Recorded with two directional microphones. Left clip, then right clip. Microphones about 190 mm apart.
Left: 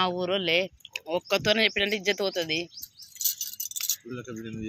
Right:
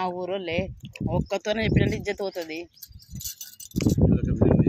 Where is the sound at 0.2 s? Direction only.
5° right (ahead or behind).